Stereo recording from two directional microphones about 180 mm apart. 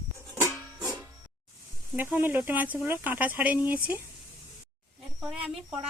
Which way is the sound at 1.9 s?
10° right (ahead or behind).